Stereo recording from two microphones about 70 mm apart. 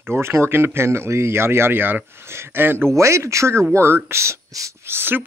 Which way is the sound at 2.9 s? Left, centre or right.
Right.